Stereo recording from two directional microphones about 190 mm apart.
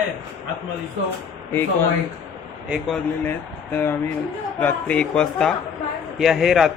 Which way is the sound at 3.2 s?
10° left (ahead or behind).